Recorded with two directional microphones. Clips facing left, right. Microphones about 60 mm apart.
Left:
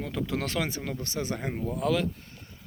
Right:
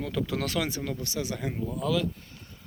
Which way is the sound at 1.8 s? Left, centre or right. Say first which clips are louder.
Left 1 dB; left.